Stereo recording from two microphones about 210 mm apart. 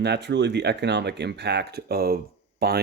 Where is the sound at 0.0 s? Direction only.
55° right (ahead or behind).